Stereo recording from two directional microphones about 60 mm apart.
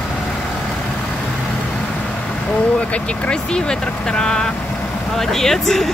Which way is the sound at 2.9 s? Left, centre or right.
Centre.